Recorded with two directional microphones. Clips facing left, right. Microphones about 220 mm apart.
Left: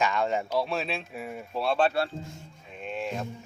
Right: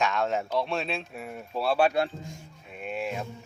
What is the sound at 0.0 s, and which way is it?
Speech, centre (ahead or behind).